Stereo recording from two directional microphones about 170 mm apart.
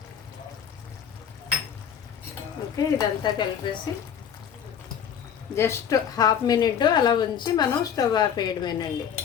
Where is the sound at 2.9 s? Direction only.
25° left (ahead or behind).